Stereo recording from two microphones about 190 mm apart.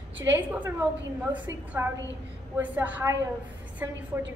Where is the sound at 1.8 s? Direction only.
15° right (ahead or behind).